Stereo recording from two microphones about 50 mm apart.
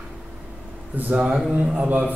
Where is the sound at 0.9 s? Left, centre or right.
Right.